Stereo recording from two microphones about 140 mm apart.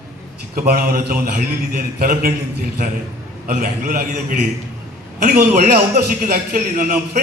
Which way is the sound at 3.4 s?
85° right.